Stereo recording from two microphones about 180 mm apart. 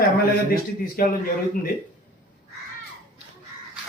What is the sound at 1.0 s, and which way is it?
Speech, 55° left (ahead or behind).